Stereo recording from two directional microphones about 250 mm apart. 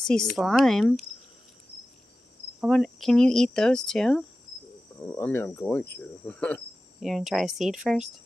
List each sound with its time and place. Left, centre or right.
0.0 s cricket: centre
2.6 s cricket: centre